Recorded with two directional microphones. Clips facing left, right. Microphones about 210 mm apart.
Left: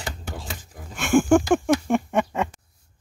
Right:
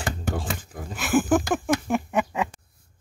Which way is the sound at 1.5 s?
Centre (ahead or behind).